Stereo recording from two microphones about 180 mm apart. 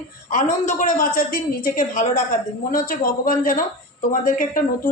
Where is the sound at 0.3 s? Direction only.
45° left (ahead or behind).